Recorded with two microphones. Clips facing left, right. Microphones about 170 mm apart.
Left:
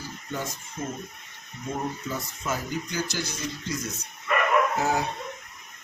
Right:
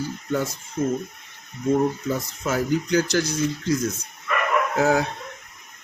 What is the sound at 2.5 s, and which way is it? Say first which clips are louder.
Speech: right 9 dB; 75° right (ahead or behind).